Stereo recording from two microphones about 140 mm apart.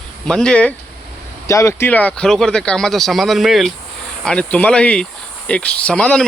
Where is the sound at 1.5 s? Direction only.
20° left (ahead or behind).